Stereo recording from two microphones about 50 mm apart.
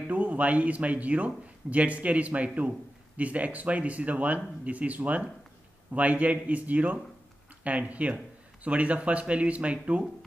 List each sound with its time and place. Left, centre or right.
0.1 s a man's voice: right